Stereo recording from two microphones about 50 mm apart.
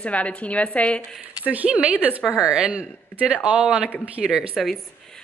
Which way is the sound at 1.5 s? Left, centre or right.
Right.